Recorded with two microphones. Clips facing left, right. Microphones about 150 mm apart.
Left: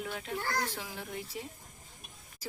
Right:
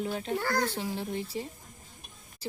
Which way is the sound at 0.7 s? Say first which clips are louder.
Right 7 dB; 30° right (ahead or behind).